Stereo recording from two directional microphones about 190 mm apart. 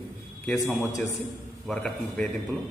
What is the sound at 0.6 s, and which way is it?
Speech, 15° left (ahead or behind).